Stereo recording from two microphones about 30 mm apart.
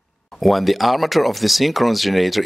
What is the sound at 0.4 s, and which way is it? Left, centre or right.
Speech, centre.